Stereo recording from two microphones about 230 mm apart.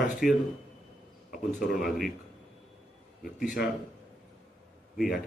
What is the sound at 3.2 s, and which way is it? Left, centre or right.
Speech, centre.